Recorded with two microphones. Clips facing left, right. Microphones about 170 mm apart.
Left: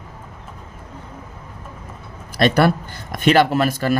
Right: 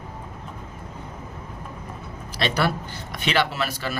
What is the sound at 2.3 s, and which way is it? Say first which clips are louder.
Speech: left 8 dB; 50° left (ahead or behind).